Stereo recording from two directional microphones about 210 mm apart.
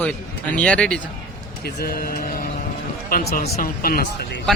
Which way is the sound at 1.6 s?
45° left (ahead or behind).